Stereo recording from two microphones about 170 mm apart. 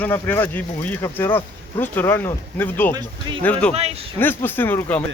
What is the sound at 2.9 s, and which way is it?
Speech, 25° right (ahead or behind).